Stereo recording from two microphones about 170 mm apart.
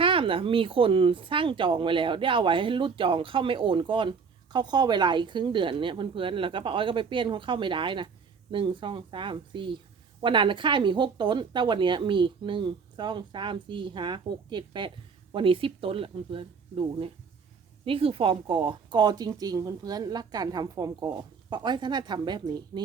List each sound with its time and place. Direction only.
0.0 s speech: 30° right (ahead or behind)